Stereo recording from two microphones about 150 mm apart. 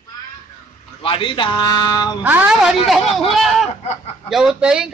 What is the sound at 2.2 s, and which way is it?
A woman's voice, 10° right (ahead or behind).